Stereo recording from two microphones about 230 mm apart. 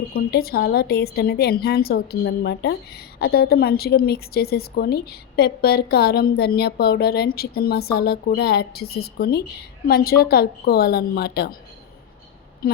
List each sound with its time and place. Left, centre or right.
0.1 s a woman's voice: left
12.6 s speech: left